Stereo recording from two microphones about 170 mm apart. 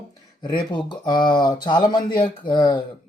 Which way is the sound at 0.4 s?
25° left (ahead or behind).